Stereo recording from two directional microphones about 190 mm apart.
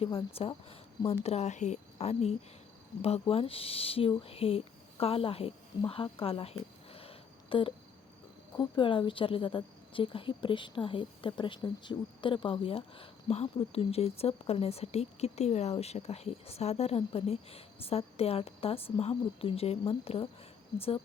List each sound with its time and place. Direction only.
0.0 s a woman's voice: 30° left (ahead or behind)
5.9 s a sound: 30° left (ahead or behind)
8.5 s a woman's voice: 25° left (ahead or behind)